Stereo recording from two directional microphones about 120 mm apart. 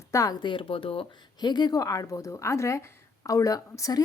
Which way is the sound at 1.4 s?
35° left (ahead or behind).